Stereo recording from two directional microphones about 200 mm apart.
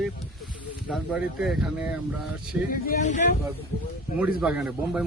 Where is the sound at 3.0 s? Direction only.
35° left (ahead or behind).